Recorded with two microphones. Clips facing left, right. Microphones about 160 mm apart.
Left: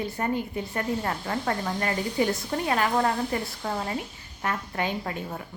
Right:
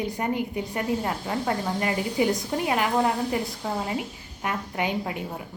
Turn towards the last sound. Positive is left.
turn(degrees=-15)  # may be behind; listen again after turning